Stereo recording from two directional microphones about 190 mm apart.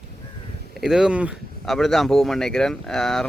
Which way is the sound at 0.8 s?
Centre (ahead or behind).